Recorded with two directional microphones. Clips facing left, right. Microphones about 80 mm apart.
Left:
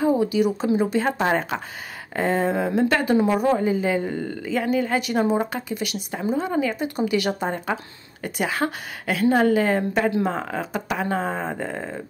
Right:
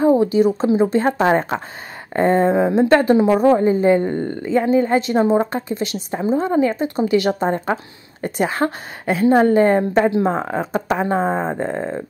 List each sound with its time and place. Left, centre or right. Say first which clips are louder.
0.2 s a woman's voice: right 5 dB; right